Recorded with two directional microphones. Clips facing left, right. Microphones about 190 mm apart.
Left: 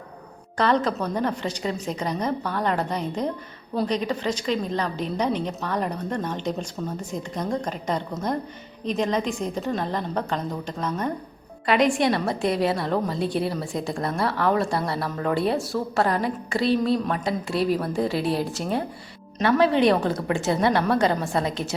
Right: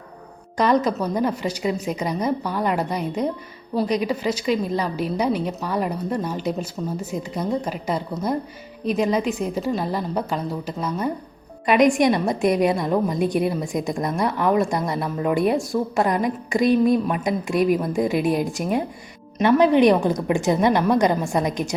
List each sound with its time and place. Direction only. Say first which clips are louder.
0.5 s a woman's voice: right 3 dB; 10° right (ahead or behind)